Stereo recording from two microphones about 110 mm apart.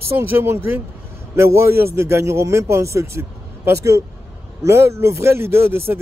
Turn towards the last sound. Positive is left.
turn(degrees=-20)  # may be behind; listen again after turning